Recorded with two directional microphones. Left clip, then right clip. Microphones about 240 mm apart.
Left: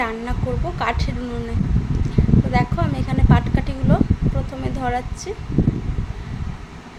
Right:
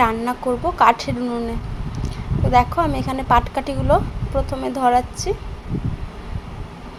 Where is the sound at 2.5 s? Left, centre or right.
Centre.